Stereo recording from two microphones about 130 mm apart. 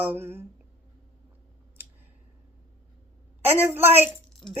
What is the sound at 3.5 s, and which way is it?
Speech, 15° right (ahead or behind).